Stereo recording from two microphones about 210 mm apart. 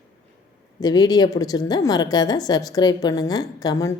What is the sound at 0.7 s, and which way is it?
A woman's voice, 20° left (ahead or behind).